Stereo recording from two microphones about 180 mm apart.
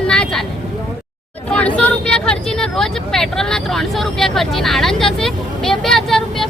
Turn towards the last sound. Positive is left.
turn(degrees=0)  # may be behind; listen again after turning